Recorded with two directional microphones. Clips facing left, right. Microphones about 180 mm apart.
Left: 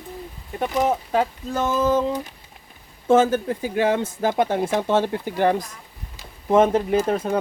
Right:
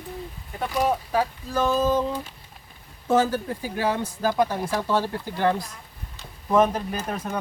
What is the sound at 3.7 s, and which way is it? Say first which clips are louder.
Speech: left 5 dB; 60° left (ahead or behind).